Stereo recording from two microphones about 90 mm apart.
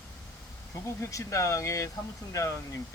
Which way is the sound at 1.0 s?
35° left (ahead or behind).